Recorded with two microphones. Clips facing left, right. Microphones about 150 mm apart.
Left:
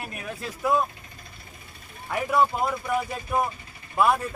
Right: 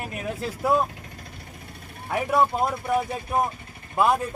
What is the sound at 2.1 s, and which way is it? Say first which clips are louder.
Speech: right 1 dB; 25° right (ahead or behind).